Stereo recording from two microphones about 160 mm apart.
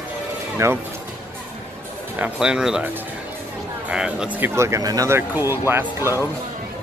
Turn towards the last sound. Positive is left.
turn(degrees=-15)  # may be behind; listen again after turning